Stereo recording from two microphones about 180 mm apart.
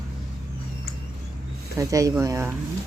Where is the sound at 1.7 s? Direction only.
20° right (ahead or behind).